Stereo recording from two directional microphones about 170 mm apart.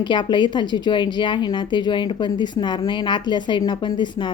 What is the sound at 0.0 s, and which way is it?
A woman's voice, 25° left (ahead or behind).